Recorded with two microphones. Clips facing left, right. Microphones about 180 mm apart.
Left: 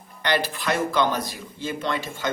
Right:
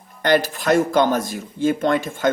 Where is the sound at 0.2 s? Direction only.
45° right (ahead or behind).